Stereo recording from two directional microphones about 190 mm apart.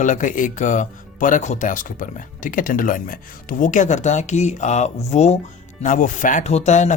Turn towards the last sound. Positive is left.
turn(degrees=40)  # may be behind; listen again after turning